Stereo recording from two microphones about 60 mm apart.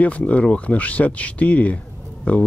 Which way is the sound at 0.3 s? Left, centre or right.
Left.